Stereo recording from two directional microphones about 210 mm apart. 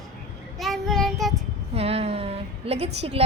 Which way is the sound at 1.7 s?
30° right (ahead or behind).